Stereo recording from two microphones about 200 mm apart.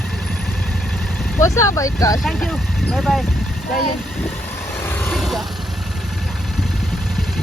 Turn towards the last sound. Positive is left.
turn(degrees=0)  # may be behind; listen again after turning